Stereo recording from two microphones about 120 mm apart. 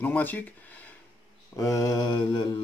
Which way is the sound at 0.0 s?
15° left (ahead or behind).